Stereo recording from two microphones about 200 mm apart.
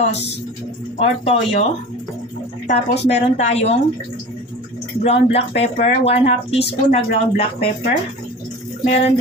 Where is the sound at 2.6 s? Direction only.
35° left (ahead or behind).